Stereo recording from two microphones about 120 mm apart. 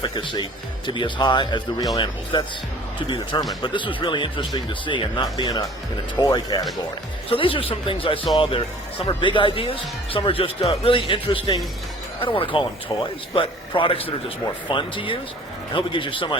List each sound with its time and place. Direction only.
0.0 s speech: 40° left (ahead or behind)
3.6 s speech: 45° left (ahead or behind)
7.3 s speech: 45° left (ahead or behind)